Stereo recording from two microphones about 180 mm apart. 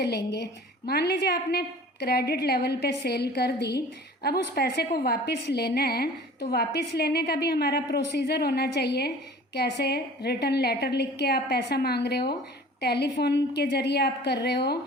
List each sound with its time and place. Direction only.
0.0 s a woman's voice: 70° left (ahead or behind)